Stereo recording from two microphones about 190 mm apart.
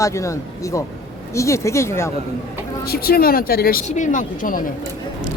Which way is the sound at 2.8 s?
55° left (ahead or behind).